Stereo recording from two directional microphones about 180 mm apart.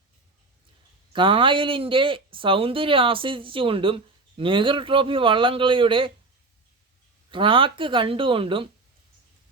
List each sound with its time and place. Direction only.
1.1 s speech: 30° right (ahead or behind)
7.3 s speech: 30° right (ahead or behind)